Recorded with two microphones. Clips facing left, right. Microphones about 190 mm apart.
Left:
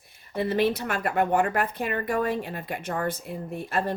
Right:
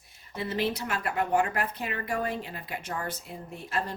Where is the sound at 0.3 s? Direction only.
55° left (ahead or behind).